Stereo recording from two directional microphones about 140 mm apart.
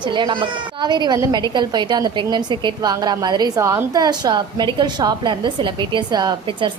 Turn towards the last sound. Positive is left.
turn(degrees=-30)  # may be behind; listen again after turning